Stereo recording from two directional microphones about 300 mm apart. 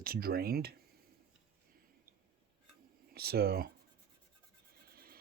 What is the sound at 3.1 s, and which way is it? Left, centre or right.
Speech, right.